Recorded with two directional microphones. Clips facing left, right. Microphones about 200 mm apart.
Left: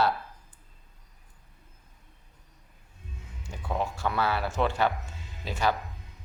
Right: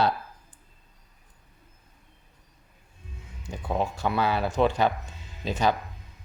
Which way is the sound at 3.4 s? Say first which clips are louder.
Right 3 dB; 15° right (ahead or behind).